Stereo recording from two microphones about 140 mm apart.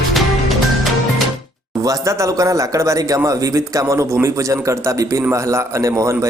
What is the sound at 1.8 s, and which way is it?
Speech, 25° right (ahead or behind).